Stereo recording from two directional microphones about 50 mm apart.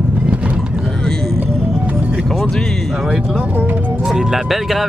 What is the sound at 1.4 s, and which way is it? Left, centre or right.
Music, right.